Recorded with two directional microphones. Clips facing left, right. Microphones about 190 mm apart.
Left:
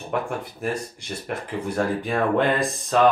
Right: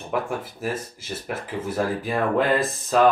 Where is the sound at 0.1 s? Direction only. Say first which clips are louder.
Even; centre (ahead or behind).